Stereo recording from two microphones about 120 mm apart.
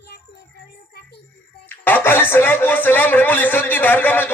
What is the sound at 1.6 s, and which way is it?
Speech, 15° left (ahead or behind).